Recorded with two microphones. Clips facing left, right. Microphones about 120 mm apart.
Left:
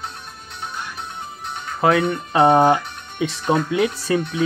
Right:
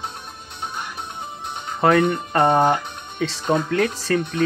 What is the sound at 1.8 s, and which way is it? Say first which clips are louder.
Speech: right 1 dB; 5° left (ahead or behind).